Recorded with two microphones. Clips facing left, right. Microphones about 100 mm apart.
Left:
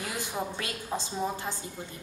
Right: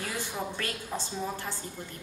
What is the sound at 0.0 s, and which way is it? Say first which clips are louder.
A woman's voice: left 1 dB; 15° left (ahead or behind).